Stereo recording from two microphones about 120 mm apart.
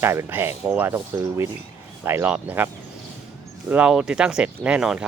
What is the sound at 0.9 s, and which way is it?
Speech, 25° right (ahead or behind).